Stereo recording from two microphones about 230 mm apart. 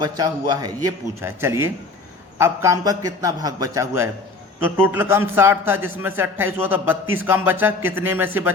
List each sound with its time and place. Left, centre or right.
0.0 s a man's voice: centre